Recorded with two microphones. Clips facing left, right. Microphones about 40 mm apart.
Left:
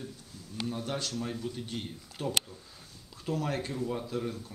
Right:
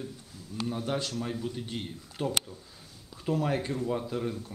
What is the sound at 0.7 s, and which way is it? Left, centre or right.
Speech, centre.